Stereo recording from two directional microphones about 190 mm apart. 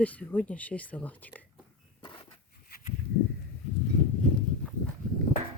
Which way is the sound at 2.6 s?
50° left (ahead or behind).